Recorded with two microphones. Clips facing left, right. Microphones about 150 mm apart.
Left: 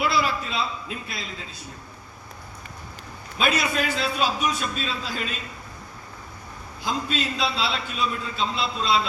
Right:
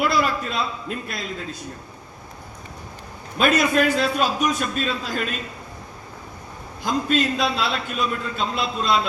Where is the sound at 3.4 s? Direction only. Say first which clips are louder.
Right 6 dB; 50° right (ahead or behind).